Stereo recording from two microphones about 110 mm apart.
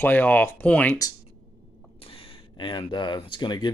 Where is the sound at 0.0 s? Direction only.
15° left (ahead or behind).